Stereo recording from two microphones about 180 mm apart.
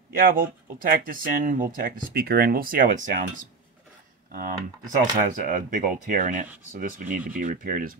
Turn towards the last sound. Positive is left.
turn(degrees=-50)  # may be behind; listen again after turning